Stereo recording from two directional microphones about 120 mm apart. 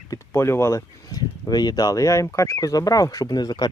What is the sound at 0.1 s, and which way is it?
Speech, 20° left (ahead or behind).